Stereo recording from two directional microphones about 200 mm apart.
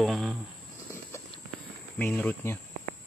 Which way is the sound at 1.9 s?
10° left (ahead or behind).